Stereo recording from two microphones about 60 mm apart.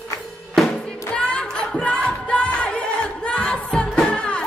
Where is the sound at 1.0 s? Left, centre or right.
Centre.